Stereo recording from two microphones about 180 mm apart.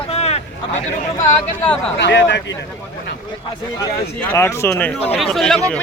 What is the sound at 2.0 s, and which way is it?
Speech, 75° left (ahead or behind).